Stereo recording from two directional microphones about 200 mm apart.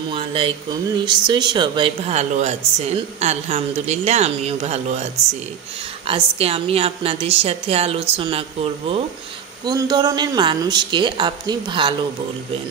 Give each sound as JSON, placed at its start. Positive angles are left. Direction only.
{"t": 0.1, "sound": "speech", "side_deg": -25}
{"t": 6.0, "sound": "a woman's voice", "side_deg": -30}